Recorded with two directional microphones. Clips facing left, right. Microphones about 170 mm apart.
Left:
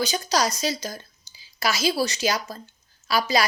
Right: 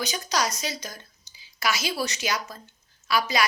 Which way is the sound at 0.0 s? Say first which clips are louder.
Left 4 dB; 30° left (ahead or behind).